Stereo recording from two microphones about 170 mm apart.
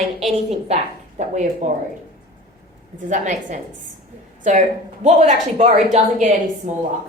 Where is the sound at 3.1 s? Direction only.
45° right (ahead or behind).